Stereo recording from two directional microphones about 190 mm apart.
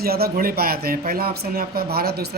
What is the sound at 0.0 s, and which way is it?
Speech, 55° right (ahead or behind).